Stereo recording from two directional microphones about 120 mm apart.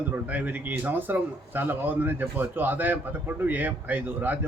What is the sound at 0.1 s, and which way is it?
Speech, 15° right (ahead or behind).